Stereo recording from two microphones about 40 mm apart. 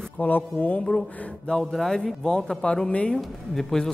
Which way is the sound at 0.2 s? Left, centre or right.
Left.